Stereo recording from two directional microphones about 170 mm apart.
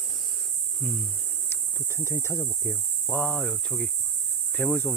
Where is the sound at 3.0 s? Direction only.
5° left (ahead or behind).